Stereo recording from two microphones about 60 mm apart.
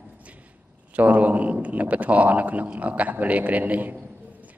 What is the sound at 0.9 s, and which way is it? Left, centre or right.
Speech, right.